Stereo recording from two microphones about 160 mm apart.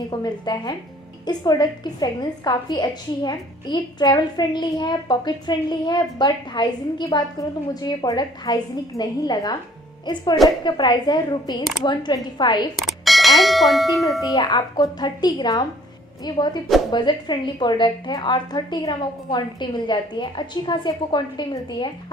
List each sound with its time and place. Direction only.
0.1 s a woman's voice: 25° left (ahead or behind)
10.6 s a woman's voice: 25° left (ahead or behind)
12.7 s ding: centre (ahead or behind)
14.2 s a woman's voice: 25° left (ahead or behind)